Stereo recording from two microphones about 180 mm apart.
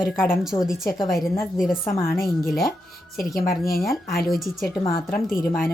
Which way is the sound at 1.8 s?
15° left (ahead or behind).